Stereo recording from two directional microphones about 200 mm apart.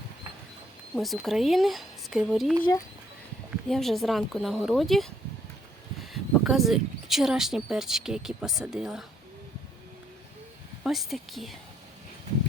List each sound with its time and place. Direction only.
0.9 s speech: centre (ahead or behind)
10.8 s speech: centre (ahead or behind)